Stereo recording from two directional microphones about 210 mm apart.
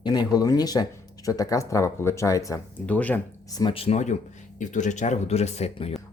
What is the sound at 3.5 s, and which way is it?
Speech, 25° left (ahead or behind).